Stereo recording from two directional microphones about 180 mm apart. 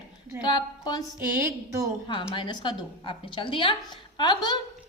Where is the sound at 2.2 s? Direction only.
20° left (ahead or behind).